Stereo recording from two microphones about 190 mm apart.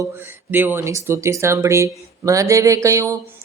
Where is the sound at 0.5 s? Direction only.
10° right (ahead or behind).